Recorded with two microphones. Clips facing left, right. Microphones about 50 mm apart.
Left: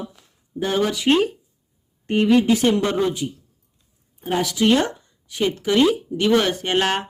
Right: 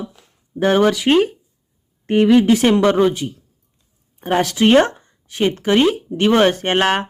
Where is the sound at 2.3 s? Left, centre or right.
Right.